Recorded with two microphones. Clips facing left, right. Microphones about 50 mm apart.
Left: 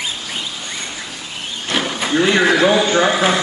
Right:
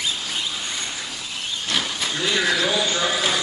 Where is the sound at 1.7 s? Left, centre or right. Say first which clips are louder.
Left 8 dB; left.